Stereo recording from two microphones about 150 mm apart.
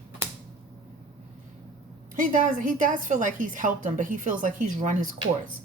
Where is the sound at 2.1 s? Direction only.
60° right (ahead or behind).